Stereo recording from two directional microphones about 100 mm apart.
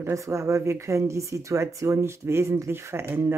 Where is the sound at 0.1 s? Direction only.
30° right (ahead or behind).